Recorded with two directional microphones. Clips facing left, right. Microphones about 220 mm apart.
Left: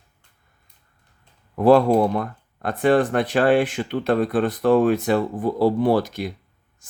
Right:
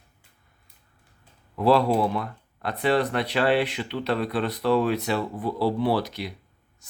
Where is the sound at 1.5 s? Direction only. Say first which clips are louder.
Left 5 dB; 50° left (ahead or behind).